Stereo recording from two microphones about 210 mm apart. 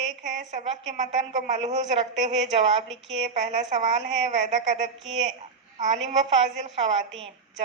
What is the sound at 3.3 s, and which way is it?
A woman's voice, 35° right (ahead or behind).